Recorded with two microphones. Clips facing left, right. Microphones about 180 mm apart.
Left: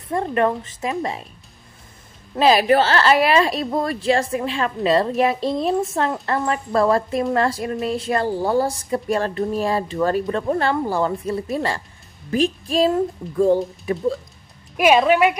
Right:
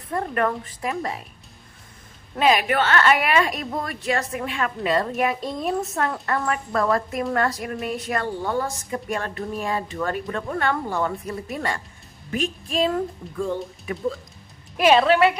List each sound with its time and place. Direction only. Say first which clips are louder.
0.1 s a woman's voice: left 4 dB; 25° left (ahead or behind)
2.3 s a woman's voice: left 5 dB; 35° left (ahead or behind)
14.8 s a woman's voice: left 1 dB; 15° left (ahead or behind)